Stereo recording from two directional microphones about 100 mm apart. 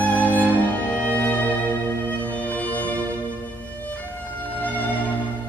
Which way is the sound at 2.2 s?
15° left (ahead or behind).